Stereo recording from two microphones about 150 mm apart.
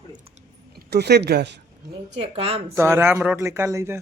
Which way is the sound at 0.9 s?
90° right.